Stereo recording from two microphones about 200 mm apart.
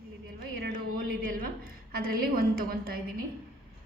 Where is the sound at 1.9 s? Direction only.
50° right (ahead or behind).